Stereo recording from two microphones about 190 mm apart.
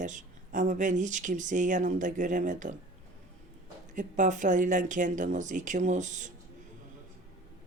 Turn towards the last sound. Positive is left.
turn(degrees=-40)  # may be behind; listen again after turning